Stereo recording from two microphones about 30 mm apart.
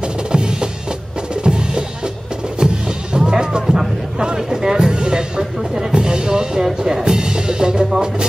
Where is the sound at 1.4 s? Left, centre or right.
Right.